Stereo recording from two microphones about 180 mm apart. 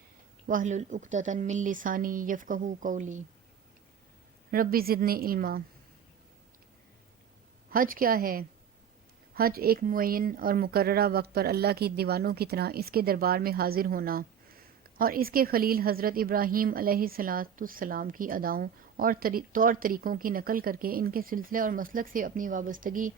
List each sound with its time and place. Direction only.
0.4 s speech: 45° right (ahead or behind)
4.5 s a woman's voice: 55° right (ahead or behind)
7.7 s speech: 50° right (ahead or behind)